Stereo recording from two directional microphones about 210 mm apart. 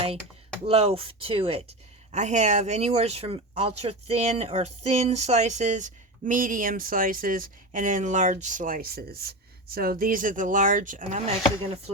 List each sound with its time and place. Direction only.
0.6 s speech: 30° right (ahead or behind)